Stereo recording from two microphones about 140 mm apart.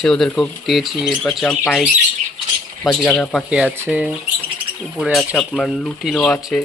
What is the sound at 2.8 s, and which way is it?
Speech, 10° left (ahead or behind).